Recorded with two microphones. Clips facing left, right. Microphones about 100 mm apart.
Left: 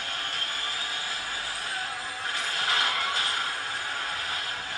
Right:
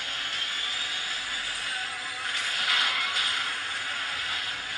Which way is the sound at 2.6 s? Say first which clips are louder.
Left 2 dB; 35° left (ahead or behind).